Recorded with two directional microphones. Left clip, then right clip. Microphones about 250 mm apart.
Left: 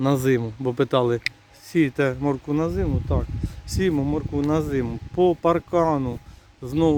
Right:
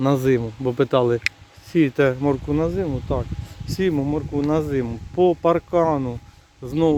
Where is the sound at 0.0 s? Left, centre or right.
Centre.